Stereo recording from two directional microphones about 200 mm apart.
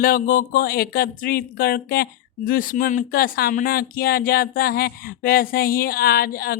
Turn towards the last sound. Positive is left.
turn(degrees=50)  # may be behind; listen again after turning